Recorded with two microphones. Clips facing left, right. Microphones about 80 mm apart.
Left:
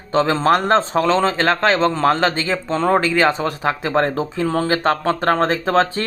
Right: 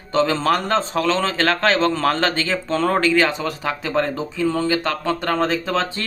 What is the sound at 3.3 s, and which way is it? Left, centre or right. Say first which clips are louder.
Speech: left 5 dB; left.